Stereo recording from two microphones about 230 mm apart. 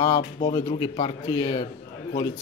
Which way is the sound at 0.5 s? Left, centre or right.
Centre.